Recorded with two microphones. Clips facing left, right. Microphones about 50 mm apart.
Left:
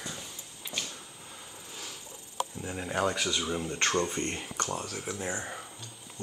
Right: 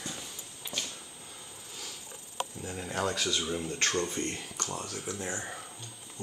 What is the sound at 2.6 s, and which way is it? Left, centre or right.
Speech, centre.